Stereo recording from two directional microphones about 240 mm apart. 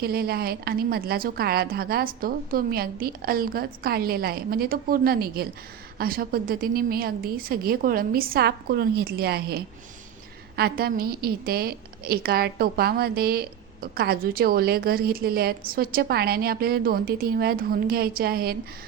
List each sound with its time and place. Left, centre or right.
0.0 s a woman's voice: right